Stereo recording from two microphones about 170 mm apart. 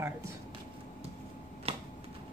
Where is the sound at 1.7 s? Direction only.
35° right (ahead or behind).